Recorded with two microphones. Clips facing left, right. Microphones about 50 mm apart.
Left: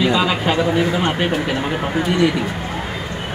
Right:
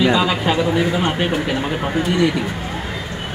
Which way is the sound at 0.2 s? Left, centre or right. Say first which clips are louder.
Even; centre.